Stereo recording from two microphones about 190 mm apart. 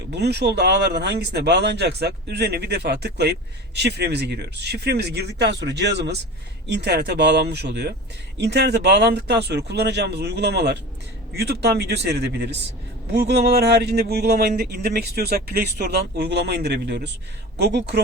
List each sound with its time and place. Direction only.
0.1 s speech: 60° right (ahead or behind)